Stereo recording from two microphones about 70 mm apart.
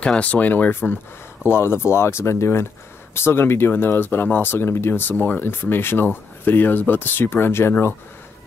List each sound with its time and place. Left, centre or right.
0.0 s speech: centre; by 7.7 s left